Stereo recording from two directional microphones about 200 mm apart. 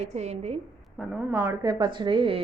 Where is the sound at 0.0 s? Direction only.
35° right (ahead or behind).